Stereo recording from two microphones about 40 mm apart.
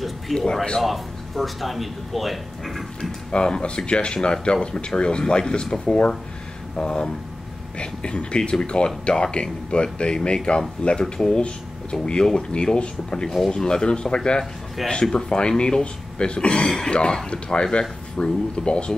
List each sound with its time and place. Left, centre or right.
0.3 s speech: centre
0.8 s speech: centre
3.0 s speech: centre
14.8 s speech: centre
15.1 s speech: left